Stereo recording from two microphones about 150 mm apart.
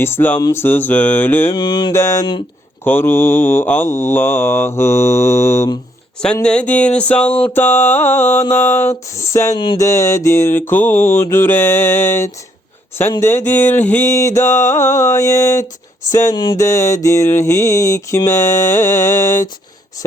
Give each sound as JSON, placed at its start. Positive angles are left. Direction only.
{"t": 0.0, "sound": "mantra", "side_deg": 15}
{"t": 1.5, "sound": "mantra", "side_deg": 30}
{"t": 6.2, "sound": "mantra", "side_deg": 5}